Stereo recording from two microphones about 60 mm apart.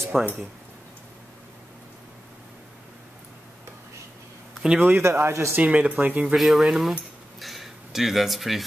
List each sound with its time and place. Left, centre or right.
0.1 s speech: centre
4.7 s speech: right
5.1 s speech: right
5.6 s speech: right
6.3 s speech: centre